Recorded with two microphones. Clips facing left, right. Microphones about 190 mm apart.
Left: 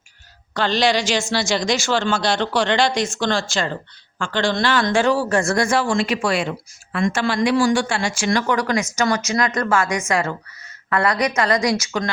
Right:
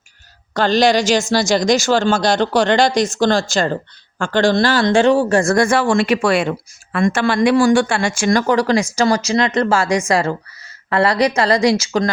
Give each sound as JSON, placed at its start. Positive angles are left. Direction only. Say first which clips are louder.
{"t": 0.5, "sound": "a woman's voice", "louder": "right 5 dB", "side_deg": -45}
{"t": 5.4, "sound": "a woman's voice", "louder": "right 5 dB", "side_deg": -40}
{"t": 5.6, "sound": "speech", "louder": "right 4 dB", "side_deg": -60}
{"t": 8.5, "sound": "a woman's voice", "louder": "right 5 dB", "side_deg": -30}